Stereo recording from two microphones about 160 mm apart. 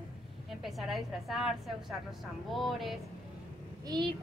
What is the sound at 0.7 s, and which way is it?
A woman's voice, centre (ahead or behind).